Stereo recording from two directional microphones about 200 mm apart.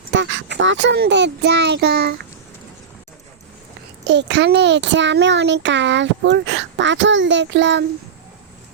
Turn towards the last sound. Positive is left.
turn(degrees=-65)  # may be behind; listen again after turning